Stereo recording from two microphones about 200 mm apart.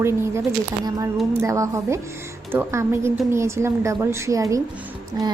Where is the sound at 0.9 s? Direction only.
20° right (ahead or behind).